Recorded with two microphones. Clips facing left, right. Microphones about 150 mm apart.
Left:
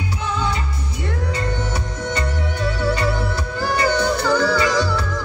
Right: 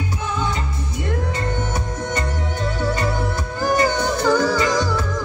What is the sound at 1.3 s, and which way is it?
Music, 50° right (ahead or behind).